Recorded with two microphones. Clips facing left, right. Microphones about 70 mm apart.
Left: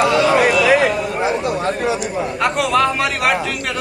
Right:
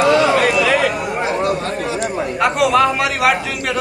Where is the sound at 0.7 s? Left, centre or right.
Centre.